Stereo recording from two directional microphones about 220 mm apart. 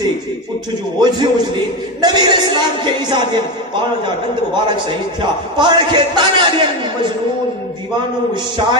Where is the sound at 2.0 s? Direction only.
20° right (ahead or behind).